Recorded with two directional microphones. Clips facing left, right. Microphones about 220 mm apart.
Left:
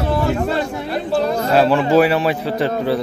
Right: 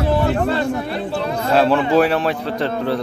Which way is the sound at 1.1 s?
40° left (ahead or behind).